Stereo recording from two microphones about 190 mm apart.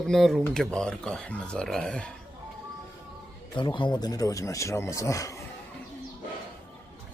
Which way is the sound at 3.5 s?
25° left (ahead or behind).